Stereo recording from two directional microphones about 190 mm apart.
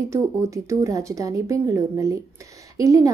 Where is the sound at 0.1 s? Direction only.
15° right (ahead or behind).